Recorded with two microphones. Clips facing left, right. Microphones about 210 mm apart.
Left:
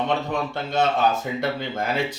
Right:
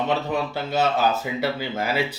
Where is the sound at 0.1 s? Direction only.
5° right (ahead or behind).